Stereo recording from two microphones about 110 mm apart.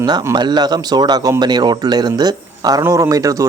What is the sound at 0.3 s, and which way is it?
Speech, 40° right (ahead or behind).